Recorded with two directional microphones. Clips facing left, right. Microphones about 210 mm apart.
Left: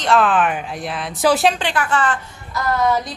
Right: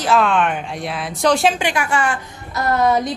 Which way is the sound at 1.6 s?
10° right (ahead or behind).